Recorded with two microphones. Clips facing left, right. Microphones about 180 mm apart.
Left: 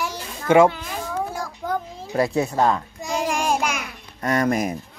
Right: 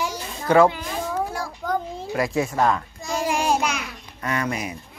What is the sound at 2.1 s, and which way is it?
Speech, 35° left (ahead or behind).